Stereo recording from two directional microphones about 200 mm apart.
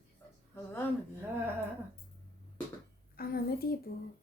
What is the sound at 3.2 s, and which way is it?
Speech, 50° left (ahead or behind).